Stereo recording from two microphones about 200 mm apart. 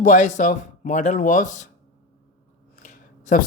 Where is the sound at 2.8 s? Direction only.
40° left (ahead or behind).